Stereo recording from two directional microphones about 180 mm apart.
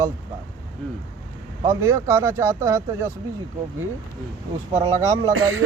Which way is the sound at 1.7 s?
15° right (ahead or behind).